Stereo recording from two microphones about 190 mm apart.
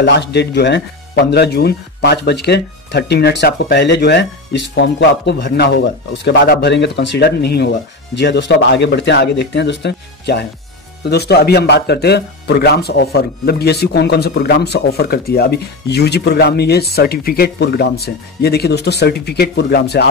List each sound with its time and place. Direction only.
0.0 s speech: 65° left (ahead or behind)